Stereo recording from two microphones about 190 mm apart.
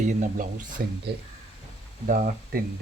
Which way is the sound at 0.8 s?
50° right (ahead or behind).